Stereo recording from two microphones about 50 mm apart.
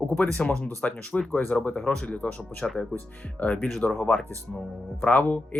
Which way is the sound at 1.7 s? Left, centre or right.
Centre.